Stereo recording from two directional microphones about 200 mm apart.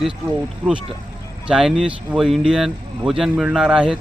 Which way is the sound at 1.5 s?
Centre (ahead or behind).